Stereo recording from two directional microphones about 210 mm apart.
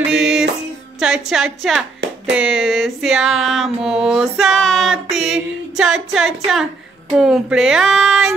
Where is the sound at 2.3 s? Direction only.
5° right (ahead or behind).